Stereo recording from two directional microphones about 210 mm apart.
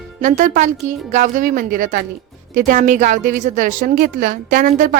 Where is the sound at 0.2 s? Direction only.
35° right (ahead or behind).